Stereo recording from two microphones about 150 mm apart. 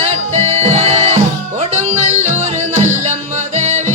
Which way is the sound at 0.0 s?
45° right (ahead or behind).